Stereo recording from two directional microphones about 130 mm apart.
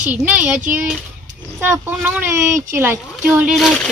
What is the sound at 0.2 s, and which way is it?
Speech, 10° right (ahead or behind).